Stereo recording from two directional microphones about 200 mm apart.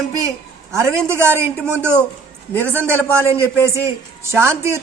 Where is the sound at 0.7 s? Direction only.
15° right (ahead or behind).